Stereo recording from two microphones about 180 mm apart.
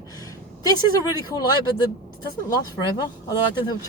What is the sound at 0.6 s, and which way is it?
Speech, 20° left (ahead or behind).